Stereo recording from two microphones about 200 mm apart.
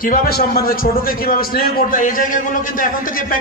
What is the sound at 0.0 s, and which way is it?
A man's voice, 45° left (ahead or behind).